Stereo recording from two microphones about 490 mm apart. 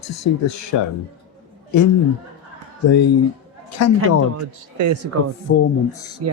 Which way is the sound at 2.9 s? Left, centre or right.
Left.